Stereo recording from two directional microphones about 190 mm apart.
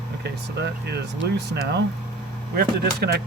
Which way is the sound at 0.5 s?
60° right (ahead or behind).